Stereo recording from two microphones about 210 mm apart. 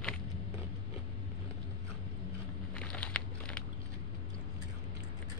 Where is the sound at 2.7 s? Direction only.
5° left (ahead or behind).